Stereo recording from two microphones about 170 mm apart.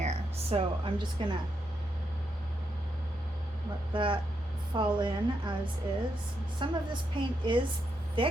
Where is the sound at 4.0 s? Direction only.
30° right (ahead or behind).